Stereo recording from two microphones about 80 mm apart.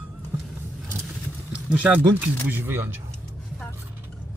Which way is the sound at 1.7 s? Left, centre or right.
Centre.